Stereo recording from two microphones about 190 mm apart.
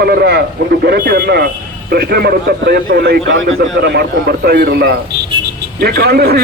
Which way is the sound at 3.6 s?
65° right (ahead or behind).